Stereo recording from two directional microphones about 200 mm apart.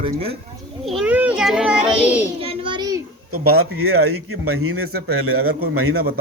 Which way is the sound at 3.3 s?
90° right.